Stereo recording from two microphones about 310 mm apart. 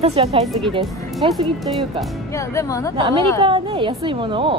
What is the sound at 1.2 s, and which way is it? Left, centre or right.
Speech, centre.